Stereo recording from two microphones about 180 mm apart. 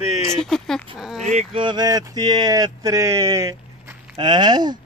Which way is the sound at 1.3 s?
35° right (ahead or behind).